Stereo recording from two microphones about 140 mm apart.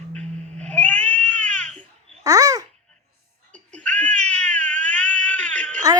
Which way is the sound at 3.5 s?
10° left (ahead or behind).